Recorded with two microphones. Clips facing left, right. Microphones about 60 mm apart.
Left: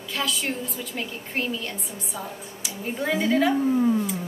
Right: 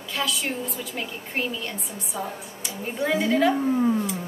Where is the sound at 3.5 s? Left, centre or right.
Centre.